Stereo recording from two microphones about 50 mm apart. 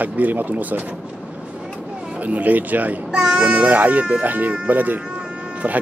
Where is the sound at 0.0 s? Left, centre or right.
Right.